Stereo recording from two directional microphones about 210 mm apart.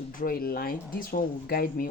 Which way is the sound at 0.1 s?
45° left (ahead or behind).